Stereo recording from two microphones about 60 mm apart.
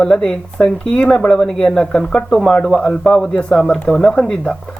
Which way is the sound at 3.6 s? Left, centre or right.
Centre.